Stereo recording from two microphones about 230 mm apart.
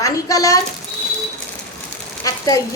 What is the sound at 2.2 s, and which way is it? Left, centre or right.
Speech, centre.